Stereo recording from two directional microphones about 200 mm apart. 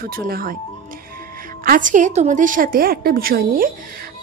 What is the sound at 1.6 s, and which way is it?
A woman's voice, 40° right (ahead or behind).